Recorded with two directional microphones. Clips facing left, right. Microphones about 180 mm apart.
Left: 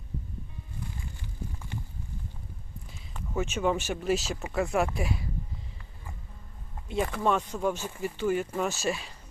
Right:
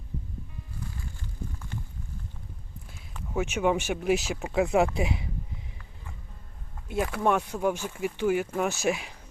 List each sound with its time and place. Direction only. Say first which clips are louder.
3.3 s speech: right 2 dB; 15° right (ahead or behind)
6.8 s speech: right 1 dB; 5° right (ahead or behind)